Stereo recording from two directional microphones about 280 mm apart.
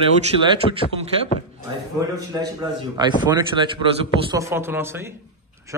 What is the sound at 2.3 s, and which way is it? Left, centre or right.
Speech, centre.